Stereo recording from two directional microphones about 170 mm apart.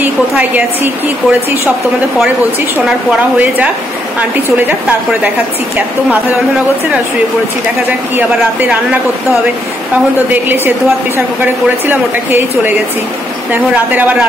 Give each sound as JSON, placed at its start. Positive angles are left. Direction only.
{"t": 0.0, "sound": "a woman's voice", "side_deg": -10}
{"t": 3.3, "sound": "speech", "side_deg": -10}
{"t": 8.2, "sound": "speech", "side_deg": -10}
{"t": 10.3, "sound": "speech", "side_deg": -10}